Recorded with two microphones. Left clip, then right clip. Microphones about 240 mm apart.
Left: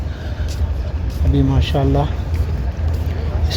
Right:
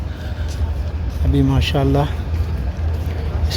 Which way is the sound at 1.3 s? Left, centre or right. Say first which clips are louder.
Right 1 dB; centre.